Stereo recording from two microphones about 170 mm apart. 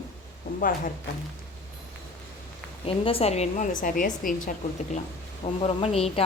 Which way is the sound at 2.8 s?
35° left (ahead or behind).